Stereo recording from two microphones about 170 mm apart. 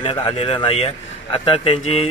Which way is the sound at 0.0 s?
30° left (ahead or behind).